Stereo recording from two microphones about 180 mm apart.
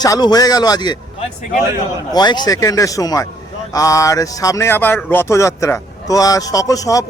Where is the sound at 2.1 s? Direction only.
25° left (ahead or behind).